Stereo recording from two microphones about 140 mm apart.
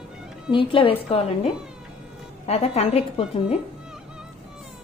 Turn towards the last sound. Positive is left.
turn(degrees=45)  # may be behind; listen again after turning